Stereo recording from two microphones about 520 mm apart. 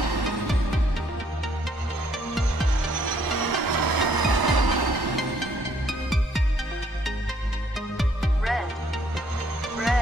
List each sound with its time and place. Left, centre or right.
0.0 s music: right
2.9 s music: right
5.9 s music: centre
8.0 s music: centre